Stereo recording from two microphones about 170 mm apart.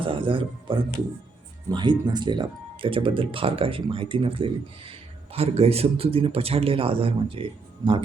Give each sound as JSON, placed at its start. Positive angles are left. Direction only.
{"t": 0.0, "sound": "speech", "side_deg": -30}